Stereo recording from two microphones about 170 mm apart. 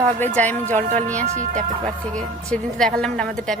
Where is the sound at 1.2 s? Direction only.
45° right (ahead or behind).